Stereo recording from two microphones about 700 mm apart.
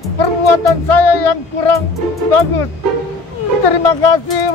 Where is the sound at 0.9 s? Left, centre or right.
Left.